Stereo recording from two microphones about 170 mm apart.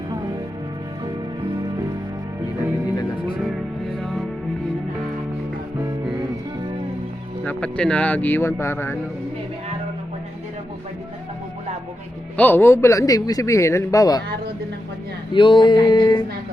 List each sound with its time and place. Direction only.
2.9 s music: 20° left (ahead or behind)
4.0 s music: centre (ahead or behind)
7.4 s a man's voice: 5° left (ahead or behind)
12.4 s a man's voice: 10° left (ahead or behind)
15.3 s a sound: 30° left (ahead or behind)